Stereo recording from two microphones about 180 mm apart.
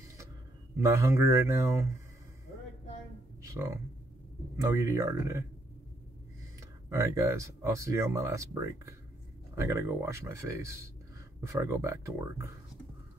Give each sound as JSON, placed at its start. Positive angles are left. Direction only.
{"t": 0.8, "sound": "speech", "side_deg": -15}
{"t": 3.4, "sound": "speech", "side_deg": -15}
{"t": 6.9, "sound": "speech", "side_deg": -15}